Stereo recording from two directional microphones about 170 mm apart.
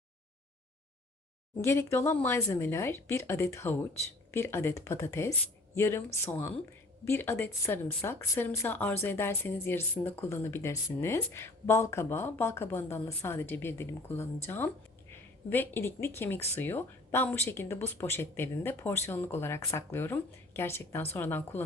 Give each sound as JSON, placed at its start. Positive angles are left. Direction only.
{"t": 1.6, "sound": "speech", "side_deg": 15}